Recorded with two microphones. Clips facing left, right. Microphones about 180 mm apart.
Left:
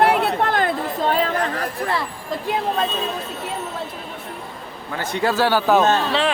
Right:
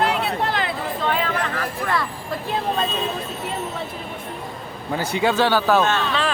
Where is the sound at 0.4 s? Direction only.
50° left (ahead or behind).